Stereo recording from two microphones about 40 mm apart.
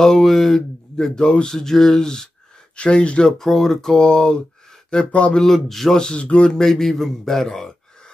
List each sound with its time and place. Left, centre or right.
0.0 s speech: centre
0.9 s speech: centre
2.7 s speech: left
3.3 s speech: centre; by 5.1 s left
5.3 s speech: centre
6.1 s speech: left; by 7.7 s centre